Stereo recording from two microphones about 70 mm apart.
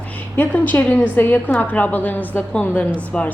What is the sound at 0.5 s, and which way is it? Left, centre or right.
A woman's voice, left.